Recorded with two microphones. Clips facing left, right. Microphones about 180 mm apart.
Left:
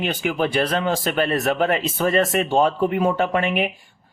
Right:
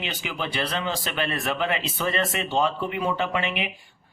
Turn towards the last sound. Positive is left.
turn(degrees=50)  # may be behind; listen again after turning